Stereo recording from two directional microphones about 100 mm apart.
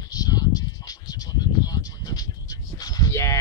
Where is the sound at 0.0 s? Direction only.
40° left (ahead or behind).